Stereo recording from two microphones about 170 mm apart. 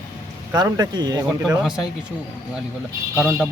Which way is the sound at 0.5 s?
25° right (ahead or behind).